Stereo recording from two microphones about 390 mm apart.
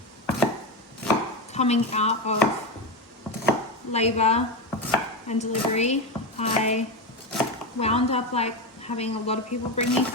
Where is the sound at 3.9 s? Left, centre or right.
Centre.